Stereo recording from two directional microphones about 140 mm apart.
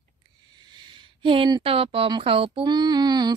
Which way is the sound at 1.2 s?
35° right (ahead or behind).